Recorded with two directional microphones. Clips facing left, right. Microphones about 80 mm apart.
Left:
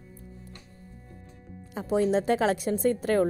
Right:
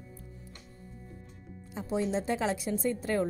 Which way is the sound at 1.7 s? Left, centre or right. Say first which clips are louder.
Left 6 dB; left.